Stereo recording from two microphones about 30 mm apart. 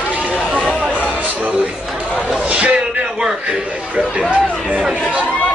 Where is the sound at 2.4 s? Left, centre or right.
Right.